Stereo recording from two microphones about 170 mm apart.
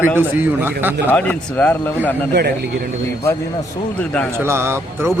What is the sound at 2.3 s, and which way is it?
Speech, 75° right (ahead or behind).